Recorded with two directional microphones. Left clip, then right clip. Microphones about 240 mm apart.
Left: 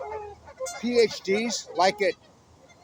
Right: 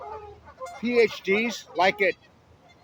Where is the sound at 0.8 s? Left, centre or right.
Centre.